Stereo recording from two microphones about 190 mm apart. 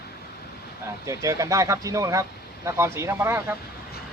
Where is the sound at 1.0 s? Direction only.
15° right (ahead or behind).